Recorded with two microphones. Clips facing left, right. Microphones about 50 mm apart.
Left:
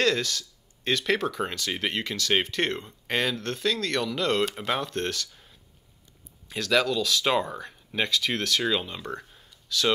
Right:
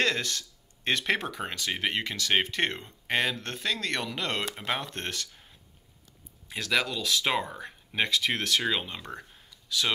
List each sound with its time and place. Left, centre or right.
0.0 s speech: right
6.5 s speech: centre